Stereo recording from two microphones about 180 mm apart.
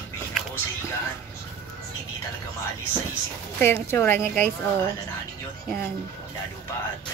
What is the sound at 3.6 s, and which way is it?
Speech, 15° left (ahead or behind).